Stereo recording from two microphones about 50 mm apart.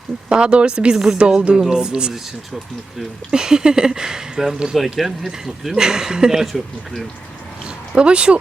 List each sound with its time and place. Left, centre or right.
0.3 s speech: centre
1.4 s speech: right
3.3 s speech: centre
7.9 s speech: right